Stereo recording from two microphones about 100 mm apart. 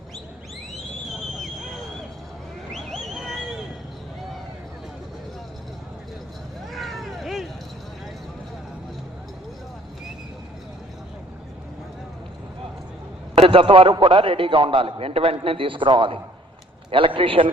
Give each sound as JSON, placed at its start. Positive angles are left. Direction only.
{"t": 1.4, "sound": "vehicle", "side_deg": 0}
{"t": 2.7, "sound": "a sound", "side_deg": 0}
{"t": 6.7, "sound": "cat", "side_deg": 0}
{"t": 13.3, "sound": "a man's voice", "side_deg": -70}
{"t": 15.4, "sound": "a man's voice", "side_deg": -60}